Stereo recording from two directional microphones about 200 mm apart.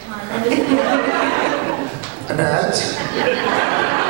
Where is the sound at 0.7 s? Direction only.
20° right (ahead or behind).